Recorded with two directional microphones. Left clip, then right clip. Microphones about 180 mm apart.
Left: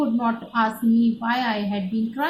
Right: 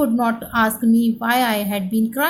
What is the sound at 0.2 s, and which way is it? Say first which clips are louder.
A woman's voice: right 4 dB; 55° right (ahead or behind).